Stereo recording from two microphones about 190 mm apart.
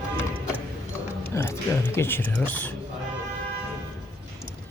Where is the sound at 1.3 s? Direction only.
10° left (ahead or behind).